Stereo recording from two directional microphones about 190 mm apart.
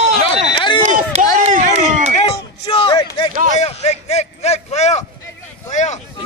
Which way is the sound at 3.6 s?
35° left (ahead or behind).